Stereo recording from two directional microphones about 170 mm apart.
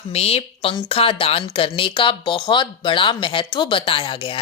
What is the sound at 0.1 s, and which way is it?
Speech, 35° left (ahead or behind).